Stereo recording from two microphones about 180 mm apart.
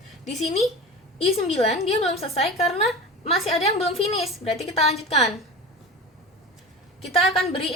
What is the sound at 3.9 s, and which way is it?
A woman's voice, 35° left (ahead or behind).